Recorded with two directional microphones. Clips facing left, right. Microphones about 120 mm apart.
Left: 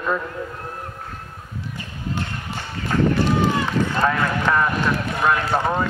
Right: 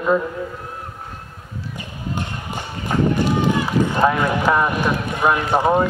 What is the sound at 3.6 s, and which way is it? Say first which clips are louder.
Speech: right 3 dB; 15° right (ahead or behind).